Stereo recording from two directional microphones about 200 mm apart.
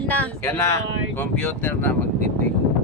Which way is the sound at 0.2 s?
10° left (ahead or behind).